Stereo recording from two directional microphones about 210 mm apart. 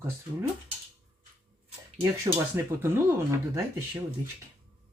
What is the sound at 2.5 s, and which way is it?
Speech, 10° right (ahead or behind).